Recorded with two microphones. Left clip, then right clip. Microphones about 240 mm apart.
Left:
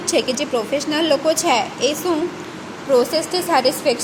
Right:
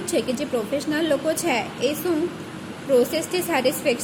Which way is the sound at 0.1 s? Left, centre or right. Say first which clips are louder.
Left 5 dB; centre.